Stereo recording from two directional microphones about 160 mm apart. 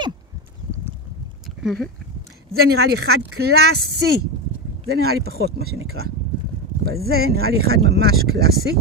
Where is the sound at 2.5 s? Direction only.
80° right.